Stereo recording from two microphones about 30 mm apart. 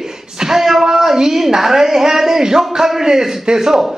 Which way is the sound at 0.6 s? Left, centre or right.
Centre.